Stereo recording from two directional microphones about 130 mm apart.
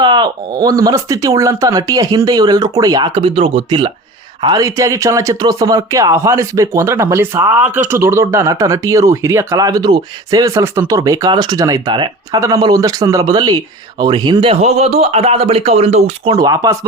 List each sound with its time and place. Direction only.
0.0 s speech: 35° right (ahead or behind)
4.4 s speech: 25° right (ahead or behind)
12.4 s speech: 25° right (ahead or behind)
14.5 s speech: 50° right (ahead or behind)
16.3 s speech: 30° right (ahead or behind)